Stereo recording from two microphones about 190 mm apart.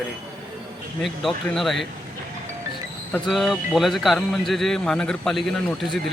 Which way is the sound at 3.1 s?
Centre (ahead or behind).